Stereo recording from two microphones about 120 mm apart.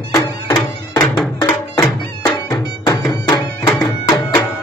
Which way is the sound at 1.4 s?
35° left (ahead or behind).